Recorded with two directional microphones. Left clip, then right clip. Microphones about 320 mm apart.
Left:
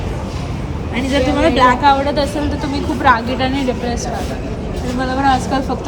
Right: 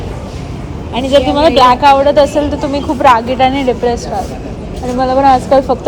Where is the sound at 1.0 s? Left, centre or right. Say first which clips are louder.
Right 6 dB; right.